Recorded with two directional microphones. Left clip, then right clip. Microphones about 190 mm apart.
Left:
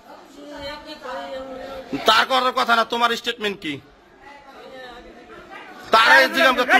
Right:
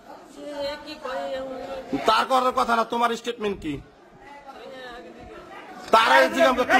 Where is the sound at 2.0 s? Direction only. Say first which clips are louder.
Left 3 dB; 10° right (ahead or behind).